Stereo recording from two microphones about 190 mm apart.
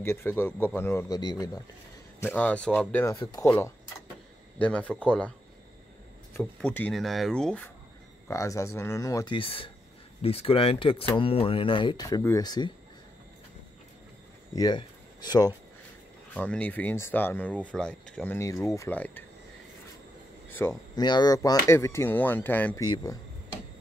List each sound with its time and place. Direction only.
0.0 s speech: 15° left (ahead or behind)
2.1 s speech: 10° left (ahead or behind)
6.3 s speech: 10° left (ahead or behind)
8.3 s speech: 15° left (ahead or behind)
14.5 s speech: 20° left (ahead or behind)
16.3 s speech: 5° left (ahead or behind)
20.5 s speech: 10° left (ahead or behind)
21.0 s speech: 20° left (ahead or behind)